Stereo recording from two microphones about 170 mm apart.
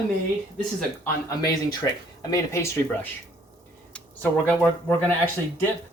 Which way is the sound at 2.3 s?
15° left (ahead or behind).